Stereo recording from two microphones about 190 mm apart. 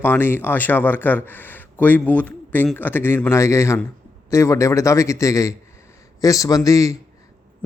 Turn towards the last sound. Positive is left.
turn(degrees=15)  # may be behind; listen again after turning